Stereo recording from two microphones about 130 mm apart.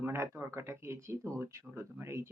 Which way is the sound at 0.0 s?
20° right (ahead or behind).